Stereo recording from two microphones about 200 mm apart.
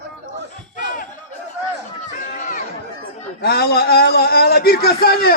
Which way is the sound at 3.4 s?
55° left (ahead or behind).